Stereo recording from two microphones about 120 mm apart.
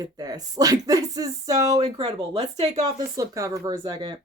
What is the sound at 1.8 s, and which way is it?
Speech, 55° right (ahead or behind).